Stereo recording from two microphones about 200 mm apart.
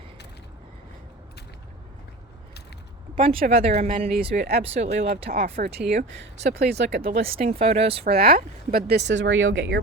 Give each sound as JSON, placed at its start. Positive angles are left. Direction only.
{"t": 3.2, "sound": "speech", "side_deg": -40}
{"t": 4.4, "sound": "speech", "side_deg": -50}
{"t": 4.6, "sound": "speech", "side_deg": -35}
{"t": 7.3, "sound": "speech", "side_deg": -35}
{"t": 8.0, "sound": "speech", "side_deg": -50}